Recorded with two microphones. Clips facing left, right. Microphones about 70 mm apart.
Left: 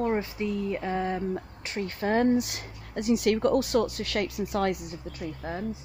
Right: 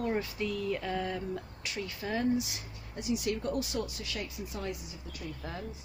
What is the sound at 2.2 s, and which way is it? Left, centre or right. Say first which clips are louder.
Speech: left 6 dB; left.